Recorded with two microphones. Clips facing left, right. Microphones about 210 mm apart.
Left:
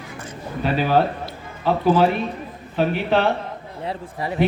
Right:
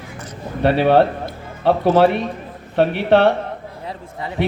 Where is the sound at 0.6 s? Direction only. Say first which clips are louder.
Right 5 dB; 65° right (ahead or behind).